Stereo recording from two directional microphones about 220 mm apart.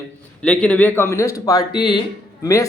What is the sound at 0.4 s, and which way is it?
Speech, 5° left (ahead or behind).